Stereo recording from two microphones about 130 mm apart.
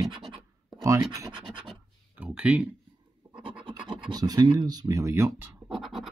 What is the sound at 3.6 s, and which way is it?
Speech, 35° right (ahead or behind).